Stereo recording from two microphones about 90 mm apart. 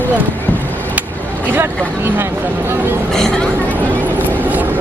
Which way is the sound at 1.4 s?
25° right (ahead or behind).